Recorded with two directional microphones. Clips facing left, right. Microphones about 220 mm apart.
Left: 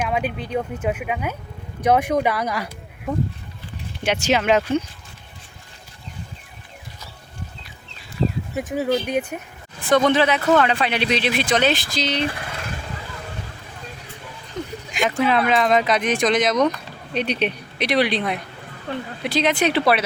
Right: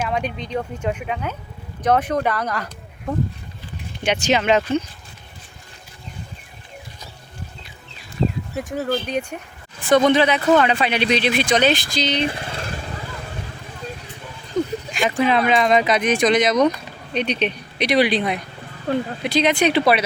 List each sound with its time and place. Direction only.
0.1 s speech: 5° left (ahead or behind)
8.5 s a man's voice: 10° left (ahead or behind)
12.3 s vehicle: 30° right (ahead or behind)
15.2 s a man's voice: centre (ahead or behind)